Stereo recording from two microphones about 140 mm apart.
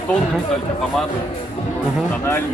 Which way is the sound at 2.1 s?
15° left (ahead or behind).